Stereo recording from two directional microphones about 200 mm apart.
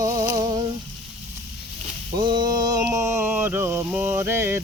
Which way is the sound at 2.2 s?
20° right (ahead or behind).